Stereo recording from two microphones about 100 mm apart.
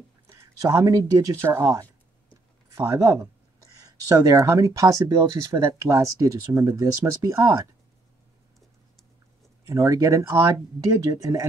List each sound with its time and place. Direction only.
0.6 s speech: 30° right (ahead or behind)
9.7 s speech: 35° right (ahead or behind)